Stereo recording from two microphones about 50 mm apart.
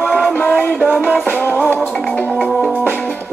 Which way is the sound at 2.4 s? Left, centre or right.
Centre.